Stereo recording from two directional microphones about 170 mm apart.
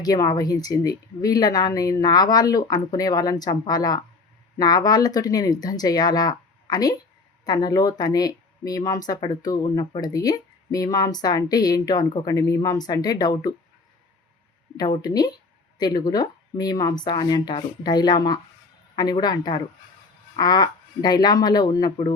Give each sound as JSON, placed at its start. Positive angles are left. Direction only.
{"t": 0.0, "sound": "speech", "side_deg": 20}
{"t": 14.8, "sound": "speech", "side_deg": 20}